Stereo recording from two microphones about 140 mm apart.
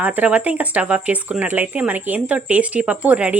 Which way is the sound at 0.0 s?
10° right (ahead or behind).